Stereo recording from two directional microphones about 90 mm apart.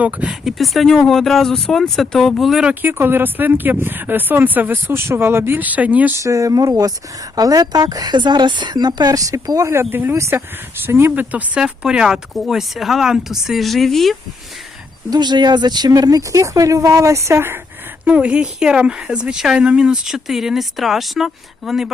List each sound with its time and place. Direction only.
0.0 s speech: 15° right (ahead or behind)
0.4 s speech: centre (ahead or behind)
2.6 s speech: 20° right (ahead or behind)
6.1 s speech: 35° right (ahead or behind); by 14.2 s centre (ahead or behind)
15.1 s speech: 55° right (ahead or behind); by 17.6 s 25° right (ahead or behind)
18.0 s speech: 15° right (ahead or behind)